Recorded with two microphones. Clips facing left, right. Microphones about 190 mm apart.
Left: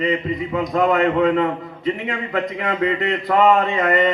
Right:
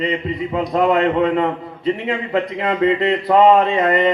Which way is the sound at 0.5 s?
30° right (ahead or behind).